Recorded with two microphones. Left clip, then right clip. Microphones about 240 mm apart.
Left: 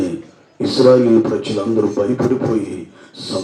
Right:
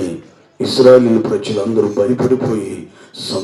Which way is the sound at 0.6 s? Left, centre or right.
Right.